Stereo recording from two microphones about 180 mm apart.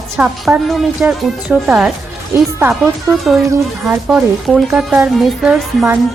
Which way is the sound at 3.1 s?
Centre (ahead or behind).